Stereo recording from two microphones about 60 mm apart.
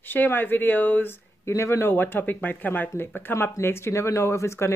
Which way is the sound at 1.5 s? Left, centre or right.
Left.